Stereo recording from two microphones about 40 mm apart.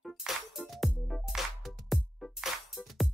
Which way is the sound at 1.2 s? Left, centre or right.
Centre.